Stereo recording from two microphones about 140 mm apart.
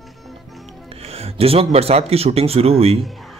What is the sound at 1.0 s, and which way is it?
Speech, 45° right (ahead or behind).